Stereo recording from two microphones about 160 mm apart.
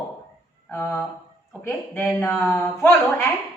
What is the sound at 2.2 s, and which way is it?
Speech, 10° left (ahead or behind).